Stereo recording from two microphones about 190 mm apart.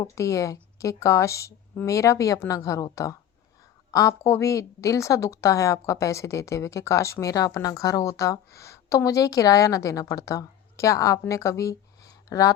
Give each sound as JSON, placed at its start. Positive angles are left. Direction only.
{"t": 0.0, "sound": "a woman's voice", "side_deg": 15}